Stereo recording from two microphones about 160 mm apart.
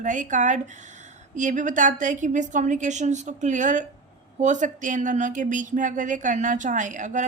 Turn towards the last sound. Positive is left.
turn(degrees=-50)  # may be behind; listen again after turning